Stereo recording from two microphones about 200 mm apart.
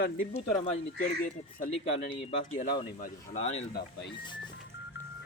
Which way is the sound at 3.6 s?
60° left (ahead or behind).